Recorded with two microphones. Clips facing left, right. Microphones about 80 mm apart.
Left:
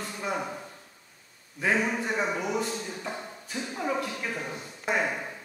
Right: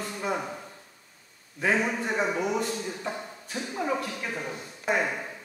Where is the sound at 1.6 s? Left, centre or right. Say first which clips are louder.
Right 1 dB; centre.